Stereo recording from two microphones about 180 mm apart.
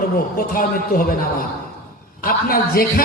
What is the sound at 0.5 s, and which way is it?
Speech, 50° left (ahead or behind).